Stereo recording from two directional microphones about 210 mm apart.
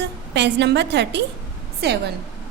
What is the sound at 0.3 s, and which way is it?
A woman's voice, 55° right (ahead or behind).